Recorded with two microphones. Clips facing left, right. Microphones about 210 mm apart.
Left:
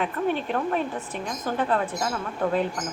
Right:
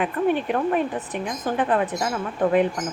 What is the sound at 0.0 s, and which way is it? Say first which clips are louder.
Speech: right 4 dB; 5° right (ahead or behind).